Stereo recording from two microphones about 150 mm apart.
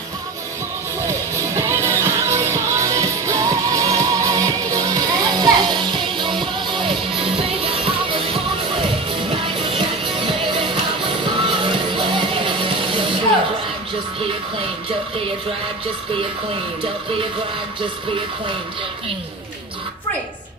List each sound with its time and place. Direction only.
1.0 s music: 20° right (ahead or behind); by 13.0 s 35° right (ahead or behind)